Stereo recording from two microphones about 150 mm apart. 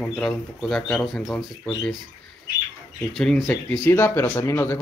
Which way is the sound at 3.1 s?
5° left (ahead or behind).